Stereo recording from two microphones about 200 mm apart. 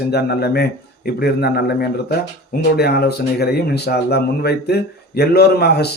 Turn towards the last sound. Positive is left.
turn(degrees=55)  # may be behind; listen again after turning